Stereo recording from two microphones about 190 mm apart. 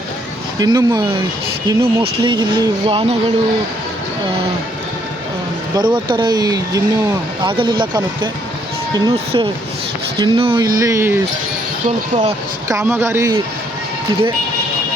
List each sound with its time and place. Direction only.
0.6 s speech: 15° right (ahead or behind)
5.7 s speech: 25° right (ahead or behind)
10.6 s speech: 20° right (ahead or behind)
11.9 s speech: 35° right (ahead or behind)
12.8 s speech: 15° right (ahead or behind)